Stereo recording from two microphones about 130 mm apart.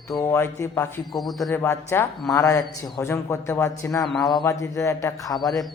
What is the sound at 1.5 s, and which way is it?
A man's voice, 15° left (ahead or behind).